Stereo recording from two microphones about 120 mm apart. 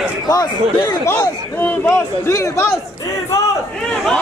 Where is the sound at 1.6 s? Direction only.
15° left (ahead or behind).